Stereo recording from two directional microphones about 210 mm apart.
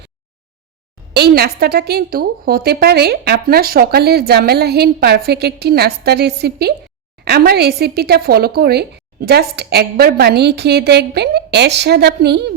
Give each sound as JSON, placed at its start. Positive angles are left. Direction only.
{"t": 1.1, "sound": "a woman's voice", "side_deg": -50}